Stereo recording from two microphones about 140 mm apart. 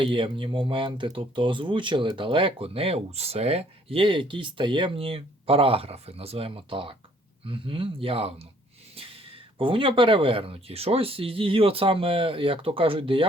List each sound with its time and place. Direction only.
0.0 s speech: 40° right (ahead or behind)